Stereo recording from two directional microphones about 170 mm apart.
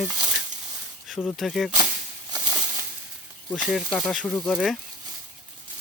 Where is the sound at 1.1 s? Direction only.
Centre (ahead or behind).